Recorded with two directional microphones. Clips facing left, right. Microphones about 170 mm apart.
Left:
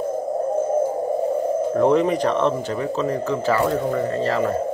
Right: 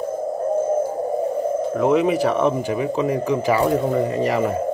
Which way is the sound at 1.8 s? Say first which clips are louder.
Even; 5° right (ahead or behind).